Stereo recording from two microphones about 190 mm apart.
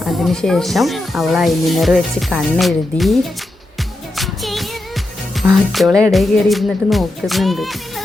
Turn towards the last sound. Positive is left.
turn(degrees=0)  # may be behind; listen again after turning